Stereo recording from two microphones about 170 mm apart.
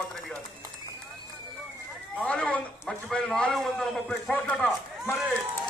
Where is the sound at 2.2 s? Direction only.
5° left (ahead or behind).